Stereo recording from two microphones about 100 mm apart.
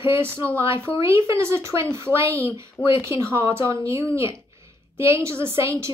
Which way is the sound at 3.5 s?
30° right (ahead or behind).